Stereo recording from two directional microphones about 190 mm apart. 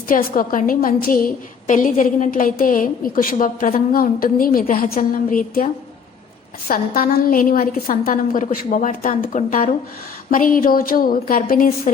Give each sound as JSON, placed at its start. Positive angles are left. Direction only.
{"t": 0.1, "sound": "a woman's voice", "side_deg": 45}